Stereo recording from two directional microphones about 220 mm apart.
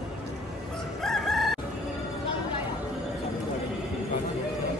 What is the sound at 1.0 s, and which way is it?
Chicken, centre (ahead or behind).